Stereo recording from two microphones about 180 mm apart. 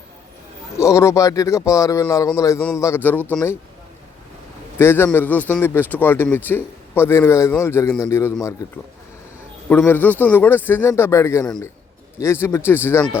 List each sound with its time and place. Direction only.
0.8 s speech: 15° left (ahead or behind)
4.8 s speech: 10° left (ahead or behind)